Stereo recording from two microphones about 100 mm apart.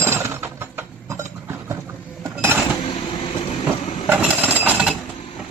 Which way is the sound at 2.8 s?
60° left (ahead or behind).